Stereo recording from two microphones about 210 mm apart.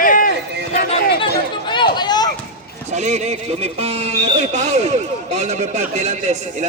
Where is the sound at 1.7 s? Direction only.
20° left (ahead or behind).